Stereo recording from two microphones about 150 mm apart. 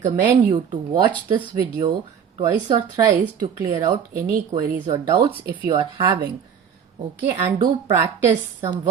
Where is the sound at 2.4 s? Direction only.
25° right (ahead or behind).